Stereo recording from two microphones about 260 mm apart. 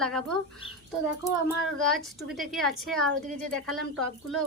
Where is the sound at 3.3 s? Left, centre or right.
Right.